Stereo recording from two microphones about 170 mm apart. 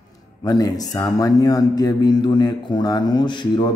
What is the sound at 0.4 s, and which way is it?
Speech, 20° left (ahead or behind).